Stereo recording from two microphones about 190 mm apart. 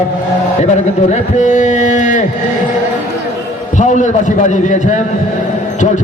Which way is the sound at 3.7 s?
40° left (ahead or behind).